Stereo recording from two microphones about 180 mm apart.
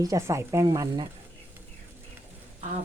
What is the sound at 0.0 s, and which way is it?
Speech, 15° right (ahead or behind).